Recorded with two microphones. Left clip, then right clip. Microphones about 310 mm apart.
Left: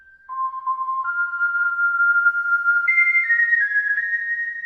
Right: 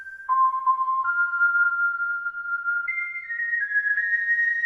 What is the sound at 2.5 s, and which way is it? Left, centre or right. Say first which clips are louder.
Music: left 8 dB; left.